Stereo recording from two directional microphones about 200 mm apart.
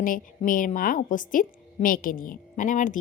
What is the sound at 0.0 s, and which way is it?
A woman's voice, 45° left (ahead or behind).